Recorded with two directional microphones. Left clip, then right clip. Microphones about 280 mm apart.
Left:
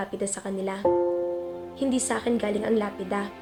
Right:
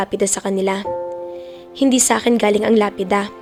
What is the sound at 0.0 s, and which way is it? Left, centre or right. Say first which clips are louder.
A woman's voice: right 11 dB; right.